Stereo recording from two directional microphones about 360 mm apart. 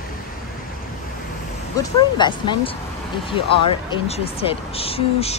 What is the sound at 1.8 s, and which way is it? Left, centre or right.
Speech, centre.